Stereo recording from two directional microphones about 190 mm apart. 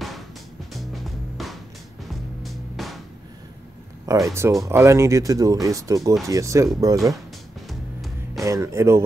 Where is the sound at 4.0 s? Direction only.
15° right (ahead or behind).